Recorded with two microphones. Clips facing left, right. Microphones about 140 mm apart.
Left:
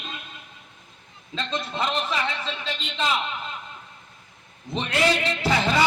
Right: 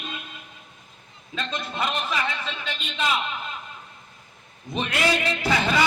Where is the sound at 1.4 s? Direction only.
25° left (ahead or behind).